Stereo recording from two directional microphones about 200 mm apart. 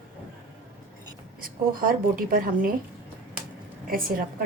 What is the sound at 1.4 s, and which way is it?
A woman's voice, 45° right (ahead or behind).